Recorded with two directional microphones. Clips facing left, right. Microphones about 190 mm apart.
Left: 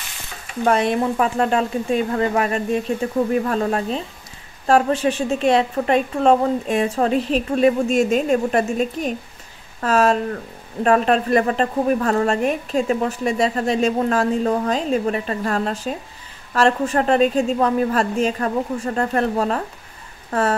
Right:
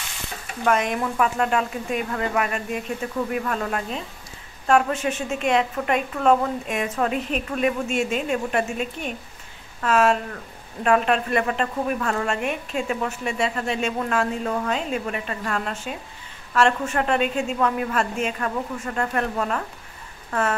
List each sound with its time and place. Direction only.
0.7 s speech: 35° left (ahead or behind)